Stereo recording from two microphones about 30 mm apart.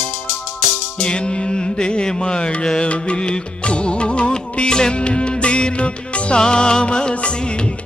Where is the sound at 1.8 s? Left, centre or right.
Left.